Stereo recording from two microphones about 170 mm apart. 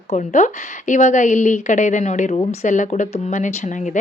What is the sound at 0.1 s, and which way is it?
Speech, 45° left (ahead or behind).